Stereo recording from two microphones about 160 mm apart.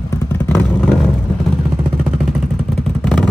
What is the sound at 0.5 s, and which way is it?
Vehicle, 5° left (ahead or behind).